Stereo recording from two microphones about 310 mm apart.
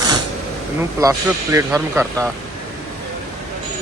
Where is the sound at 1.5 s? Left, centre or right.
Centre.